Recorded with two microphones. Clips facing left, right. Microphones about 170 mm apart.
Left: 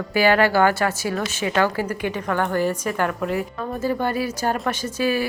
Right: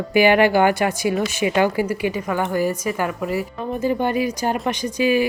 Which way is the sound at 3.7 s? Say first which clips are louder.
Right 3 dB; 15° right (ahead or behind).